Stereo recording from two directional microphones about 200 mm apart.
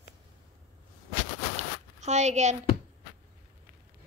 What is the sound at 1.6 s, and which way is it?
Zipper, 35° right (ahead or behind).